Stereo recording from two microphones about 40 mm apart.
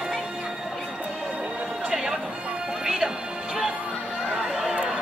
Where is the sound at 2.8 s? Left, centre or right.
Centre.